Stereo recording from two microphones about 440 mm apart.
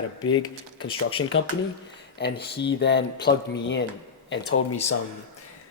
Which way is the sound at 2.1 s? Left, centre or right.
Left.